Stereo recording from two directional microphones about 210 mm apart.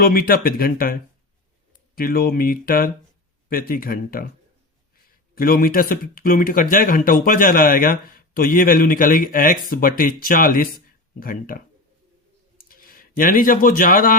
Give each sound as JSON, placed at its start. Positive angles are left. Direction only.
{"t": 0.0, "sound": "speech", "side_deg": 45}
{"t": 2.0, "sound": "speech", "side_deg": 45}
{"t": 5.3, "sound": "speech", "side_deg": 45}